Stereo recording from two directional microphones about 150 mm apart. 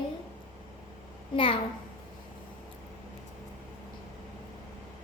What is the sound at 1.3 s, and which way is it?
Speech, 35° left (ahead or behind).